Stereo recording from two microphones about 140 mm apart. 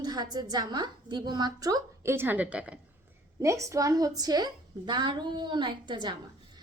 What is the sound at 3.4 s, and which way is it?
A woman's voice, 20° right (ahead or behind).